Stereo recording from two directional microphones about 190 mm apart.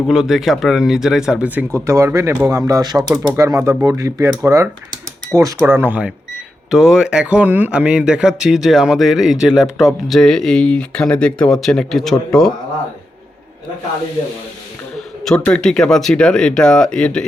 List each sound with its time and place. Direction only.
0.1 s speech: centre (ahead or behind)
14.9 s speech: centre (ahead or behind)